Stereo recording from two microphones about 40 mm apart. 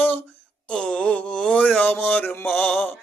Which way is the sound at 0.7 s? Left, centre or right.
Left.